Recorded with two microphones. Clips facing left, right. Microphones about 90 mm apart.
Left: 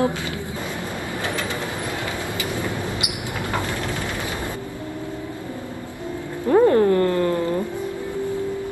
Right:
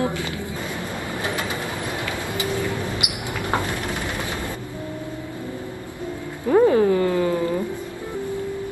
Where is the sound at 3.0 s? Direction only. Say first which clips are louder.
Even; 20° right (ahead or behind).